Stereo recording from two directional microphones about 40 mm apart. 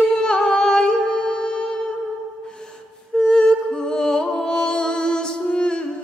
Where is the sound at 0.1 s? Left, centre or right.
Left.